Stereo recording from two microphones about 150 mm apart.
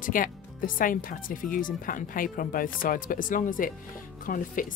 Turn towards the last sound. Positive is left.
turn(degrees=65)  # may be behind; listen again after turning